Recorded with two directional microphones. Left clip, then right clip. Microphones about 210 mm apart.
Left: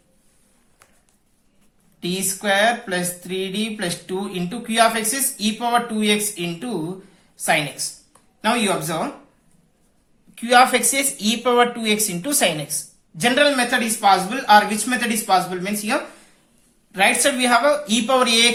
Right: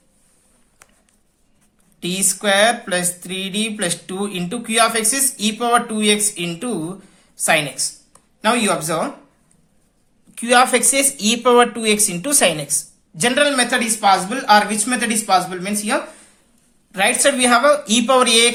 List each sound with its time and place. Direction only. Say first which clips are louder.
0.8 s a sound: right 4 dB; 20° right (ahead or behind)
2.0 s speech: right 3 dB; 30° right (ahead or behind)
10.3 s speech: even; 30° right (ahead or behind)